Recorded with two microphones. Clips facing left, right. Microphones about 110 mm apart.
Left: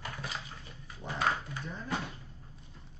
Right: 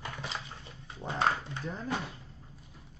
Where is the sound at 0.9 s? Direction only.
25° right (ahead or behind).